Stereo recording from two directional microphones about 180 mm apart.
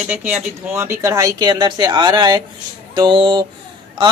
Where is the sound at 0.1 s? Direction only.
10° right (ahead or behind).